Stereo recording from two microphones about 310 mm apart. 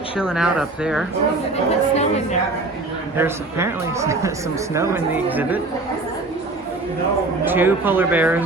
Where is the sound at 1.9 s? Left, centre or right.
Left.